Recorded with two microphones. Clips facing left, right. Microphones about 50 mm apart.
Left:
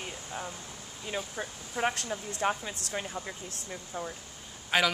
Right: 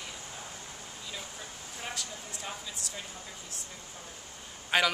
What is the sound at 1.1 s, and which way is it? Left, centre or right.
Speech, left.